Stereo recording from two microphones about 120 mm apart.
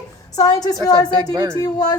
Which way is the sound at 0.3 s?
30° left (ahead or behind).